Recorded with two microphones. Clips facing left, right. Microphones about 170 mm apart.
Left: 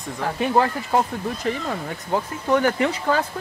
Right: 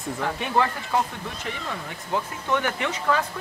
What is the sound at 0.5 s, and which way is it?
Speech, 40° left (ahead or behind).